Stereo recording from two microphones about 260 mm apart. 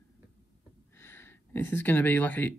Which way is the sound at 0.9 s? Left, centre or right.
Centre.